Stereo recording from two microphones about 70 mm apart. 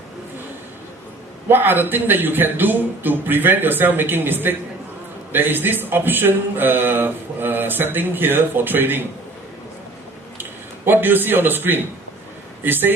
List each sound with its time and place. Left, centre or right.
1.5 s a man's voice: right
10.8 s a man's voice: right